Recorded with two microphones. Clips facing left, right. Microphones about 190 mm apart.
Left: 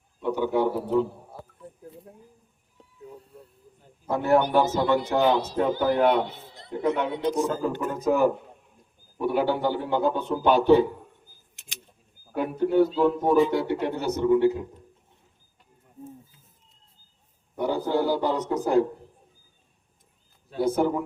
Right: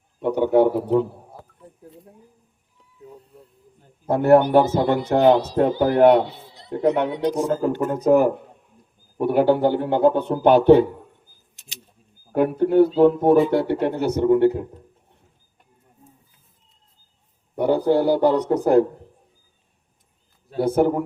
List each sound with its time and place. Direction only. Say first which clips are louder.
0.2 s a man's voice: right 7 dB; 60° right (ahead or behind)
4.1 s a man's voice: right 7 dB; 60° right (ahead or behind)
6.2 s a sound: right 2 dB; 50° left (ahead or behind)
6.8 s a man's voice: right 6 dB; 65° right (ahead or behind)
7.3 s a man's voice: right 3 dB; 45° right (ahead or behind)
7.9 s a man's voice: right 5 dB; 60° right (ahead or behind)
12.3 s a man's voice: right 6 dB; 55° right (ahead or behind)
17.6 s a man's voice: right 6 dB; 65° right (ahead or behind)
20.6 s a man's voice: right 5 dB; 60° right (ahead or behind)